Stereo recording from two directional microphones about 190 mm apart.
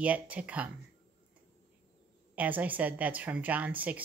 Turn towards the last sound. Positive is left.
turn(degrees=-10)  # may be behind; listen again after turning